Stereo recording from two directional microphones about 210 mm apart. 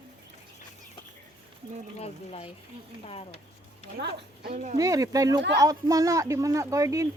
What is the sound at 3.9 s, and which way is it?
Speech, 45° right (ahead or behind).